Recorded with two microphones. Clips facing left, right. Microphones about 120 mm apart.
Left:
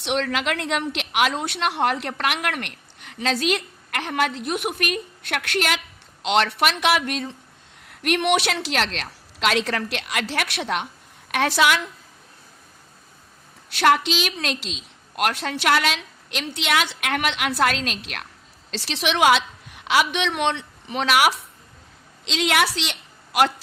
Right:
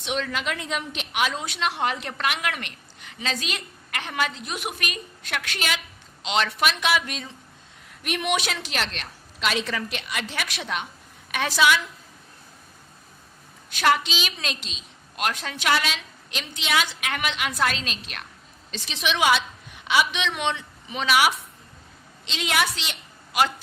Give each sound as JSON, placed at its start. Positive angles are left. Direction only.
{"t": 0.0, "sound": "a woman's voice", "side_deg": 70}
{"t": 1.4, "sound": "a woman's voice", "side_deg": 65}
{"t": 7.9, "sound": "a woman's voice", "side_deg": 75}
{"t": 13.7, "sound": "a woman's voice", "side_deg": 65}
{"t": 22.3, "sound": "a woman's voice", "side_deg": 85}